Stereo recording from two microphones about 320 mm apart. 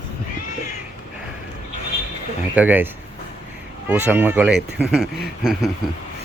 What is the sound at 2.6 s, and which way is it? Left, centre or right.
Speech, centre.